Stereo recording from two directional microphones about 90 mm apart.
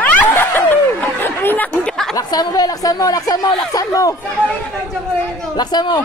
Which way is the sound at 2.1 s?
45° left (ahead or behind).